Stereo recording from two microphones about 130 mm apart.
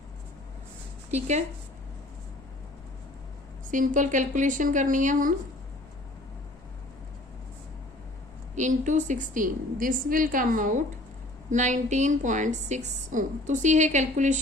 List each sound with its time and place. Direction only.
1.1 s speech: 60° right (ahead or behind)
3.7 s a woman's voice: 80° right
8.5 s a woman's voice: 70° right (ahead or behind); by 10.8 s 85° right
11.5 s a woman's voice: 70° right (ahead or behind)